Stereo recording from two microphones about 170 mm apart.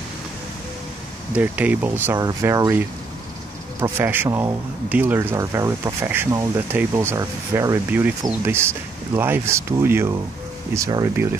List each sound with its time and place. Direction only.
1.3 s speech: 10° right (ahead or behind)
3.8 s speech: 10° right (ahead or behind)